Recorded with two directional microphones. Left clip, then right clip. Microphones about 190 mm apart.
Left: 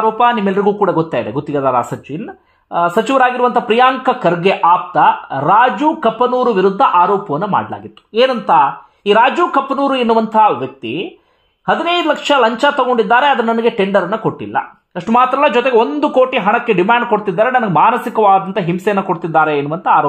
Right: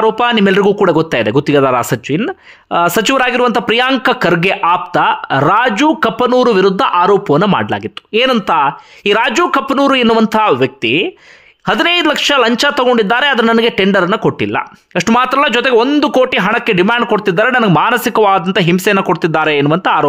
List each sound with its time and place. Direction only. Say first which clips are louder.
0.0 s speech: right 1 dB; 30° right (ahead or behind)
15.1 s speech: left 1 dB; 20° right (ahead or behind)